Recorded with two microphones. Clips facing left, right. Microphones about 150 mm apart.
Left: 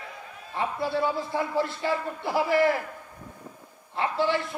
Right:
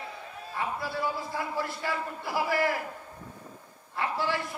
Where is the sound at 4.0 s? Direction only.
25° left (ahead or behind).